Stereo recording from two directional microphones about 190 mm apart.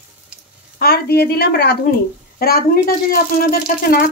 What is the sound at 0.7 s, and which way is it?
A woman's voice, 55° left (ahead or behind).